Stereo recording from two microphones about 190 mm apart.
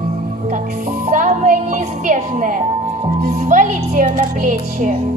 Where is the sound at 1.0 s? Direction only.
45° right (ahead or behind).